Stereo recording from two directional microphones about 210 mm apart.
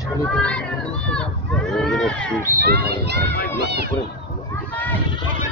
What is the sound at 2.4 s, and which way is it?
Speech, 45° right (ahead or behind).